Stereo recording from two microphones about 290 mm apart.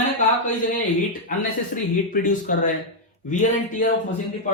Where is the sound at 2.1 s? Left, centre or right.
Left.